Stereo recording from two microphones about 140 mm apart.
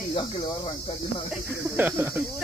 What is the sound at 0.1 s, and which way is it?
Speech, 35° left (ahead or behind).